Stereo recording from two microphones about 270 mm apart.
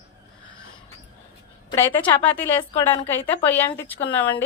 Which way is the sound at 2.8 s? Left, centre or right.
Centre.